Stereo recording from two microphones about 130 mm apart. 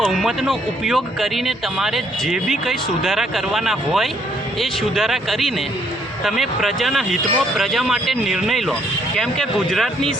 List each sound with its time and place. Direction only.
0.0 s speech: centre (ahead or behind)